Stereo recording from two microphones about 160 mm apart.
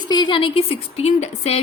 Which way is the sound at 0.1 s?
30° left (ahead or behind).